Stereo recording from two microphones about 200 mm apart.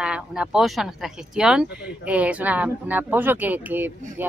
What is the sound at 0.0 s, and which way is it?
Speech, 5° right (ahead or behind).